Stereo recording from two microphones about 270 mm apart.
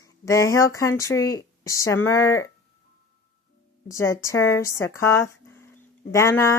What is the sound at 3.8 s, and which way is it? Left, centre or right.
A woman's voice, centre.